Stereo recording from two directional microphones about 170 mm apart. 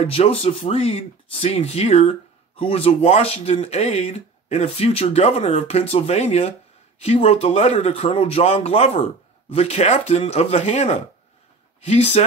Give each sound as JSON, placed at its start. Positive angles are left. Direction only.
{"t": 0.0, "sound": "speech", "side_deg": 35}